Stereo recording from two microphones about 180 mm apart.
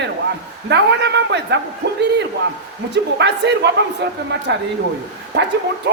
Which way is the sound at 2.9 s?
70° right (ahead or behind).